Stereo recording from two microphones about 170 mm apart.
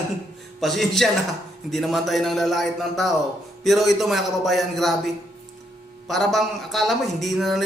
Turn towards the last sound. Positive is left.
turn(degrees=0)  # may be behind; listen again after turning